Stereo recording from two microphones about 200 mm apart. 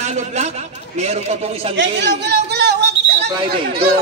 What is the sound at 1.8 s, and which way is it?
A man's voice, 60° right (ahead or behind).